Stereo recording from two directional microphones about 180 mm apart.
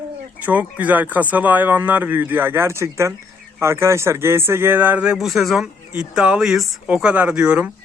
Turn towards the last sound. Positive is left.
turn(degrees=-5)  # may be behind; listen again after turning